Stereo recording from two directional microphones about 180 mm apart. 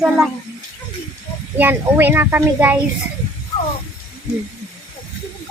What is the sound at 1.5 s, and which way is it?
Speech, 10° right (ahead or behind).